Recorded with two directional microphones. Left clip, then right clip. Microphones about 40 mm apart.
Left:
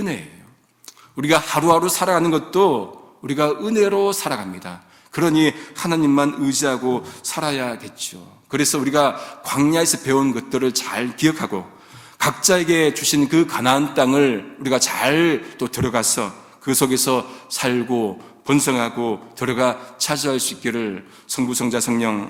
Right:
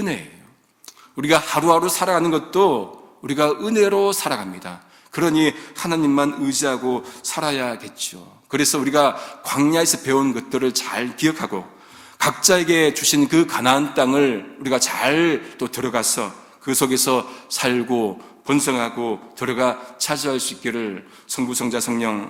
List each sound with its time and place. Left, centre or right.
1.1 s a man's voice: centre
3.2 s a man's voice: right
4.5 s a man's voice: centre
7.4 s a man's voice: right; by 11.6 s centre
12.3 s speech: right
13.5 s a man's voice: centre
13.7 s a man's voice: centre
16.9 s speech: centre; by 18.1 s right
18.4 s a man's voice: centre
21.2 s a man's voice: centre